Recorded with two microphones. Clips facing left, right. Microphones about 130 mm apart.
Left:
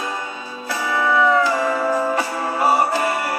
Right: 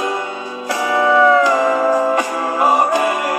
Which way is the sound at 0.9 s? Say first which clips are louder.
Right 5 dB; 65° right (ahead or behind).